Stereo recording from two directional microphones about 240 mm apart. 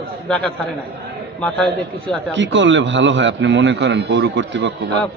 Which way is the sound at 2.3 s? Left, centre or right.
Right.